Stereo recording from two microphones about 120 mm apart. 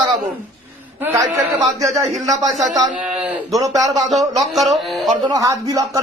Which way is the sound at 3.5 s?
30° right (ahead or behind).